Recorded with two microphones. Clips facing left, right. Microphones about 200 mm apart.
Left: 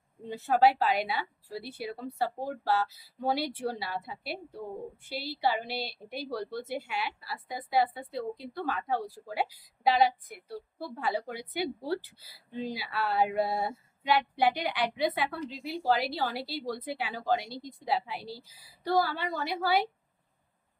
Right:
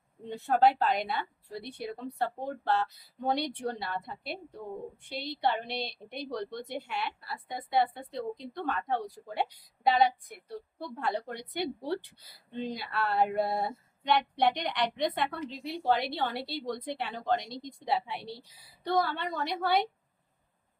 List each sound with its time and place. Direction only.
0.3 s a woman's voice: 5° left (ahead or behind)